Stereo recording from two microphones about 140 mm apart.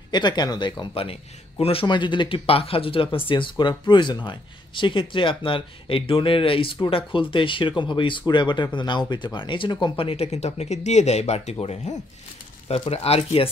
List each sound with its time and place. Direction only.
0.1 s speech: 30° left (ahead or behind)